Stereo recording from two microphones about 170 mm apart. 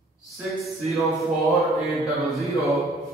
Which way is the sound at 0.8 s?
Centre (ahead or behind).